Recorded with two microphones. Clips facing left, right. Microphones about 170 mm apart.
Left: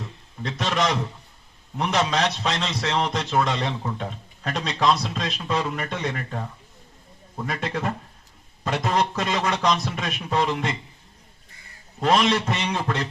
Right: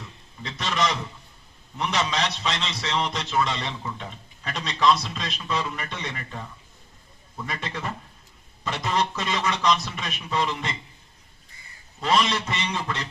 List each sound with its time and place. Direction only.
0.4 s a man's voice: 50° left (ahead or behind)
11.9 s a man's voice: 50° left (ahead or behind)